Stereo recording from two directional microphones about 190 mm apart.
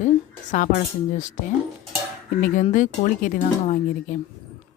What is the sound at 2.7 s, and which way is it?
Speech, 45° left (ahead or behind).